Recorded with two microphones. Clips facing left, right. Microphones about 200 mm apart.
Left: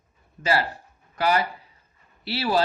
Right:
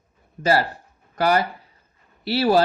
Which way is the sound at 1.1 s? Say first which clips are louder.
Right 3 dB; 45° right (ahead or behind).